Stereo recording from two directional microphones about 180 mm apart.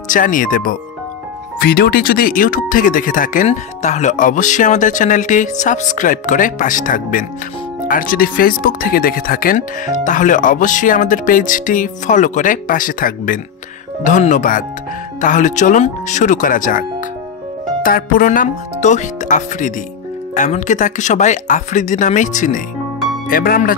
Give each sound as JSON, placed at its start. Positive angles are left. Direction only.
{"t": 0.1, "sound": "speech", "side_deg": 45}
{"t": 17.8, "sound": "speech", "side_deg": 50}